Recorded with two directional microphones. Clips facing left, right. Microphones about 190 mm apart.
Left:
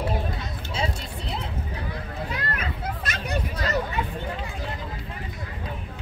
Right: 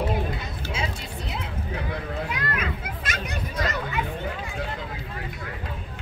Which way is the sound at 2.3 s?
35° left (ahead or behind).